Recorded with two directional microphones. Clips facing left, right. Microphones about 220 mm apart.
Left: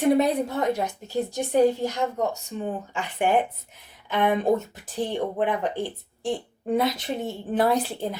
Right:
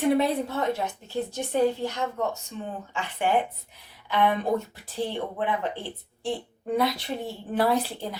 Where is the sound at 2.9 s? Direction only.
15° left (ahead or behind).